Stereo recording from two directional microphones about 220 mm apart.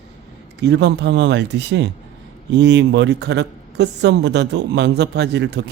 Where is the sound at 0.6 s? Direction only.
50° right (ahead or behind).